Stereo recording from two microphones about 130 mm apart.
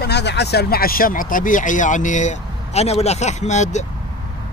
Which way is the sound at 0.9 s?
90° left.